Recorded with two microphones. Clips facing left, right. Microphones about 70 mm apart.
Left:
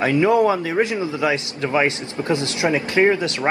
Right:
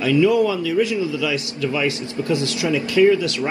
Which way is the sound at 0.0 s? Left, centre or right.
Left.